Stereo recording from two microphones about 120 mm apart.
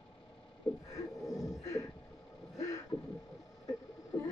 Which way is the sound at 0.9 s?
30° left (ahead or behind).